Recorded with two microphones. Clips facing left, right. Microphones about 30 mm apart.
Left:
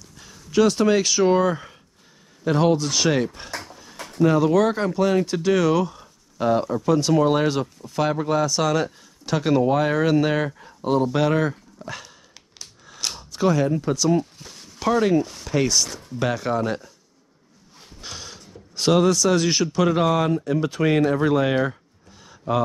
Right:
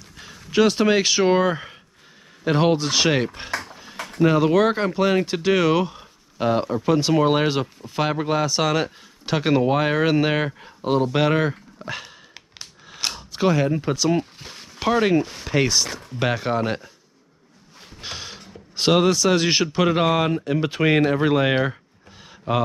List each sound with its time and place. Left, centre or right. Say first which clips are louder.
0.1 s speech: even; right
18.0 s speech: right 3 dB; right